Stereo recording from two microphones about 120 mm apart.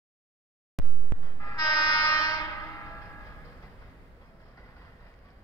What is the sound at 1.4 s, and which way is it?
Train, 30° left (ahead or behind).